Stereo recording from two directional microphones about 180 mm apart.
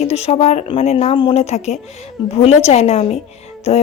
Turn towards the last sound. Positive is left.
turn(degrees=35)  # may be behind; listen again after turning